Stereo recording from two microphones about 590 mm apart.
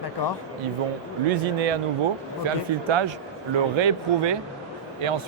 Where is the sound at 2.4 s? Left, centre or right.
Right.